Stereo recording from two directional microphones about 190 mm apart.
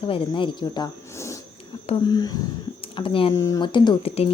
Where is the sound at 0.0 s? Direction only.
25° left (ahead or behind).